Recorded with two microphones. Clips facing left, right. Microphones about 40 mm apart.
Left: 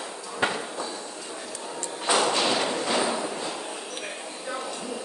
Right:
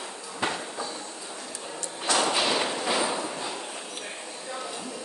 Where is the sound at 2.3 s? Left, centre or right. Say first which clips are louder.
Left 1 dB; centre.